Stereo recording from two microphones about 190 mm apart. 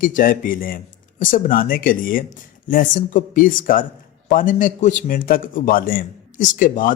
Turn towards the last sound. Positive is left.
turn(degrees=45)  # may be behind; listen again after turning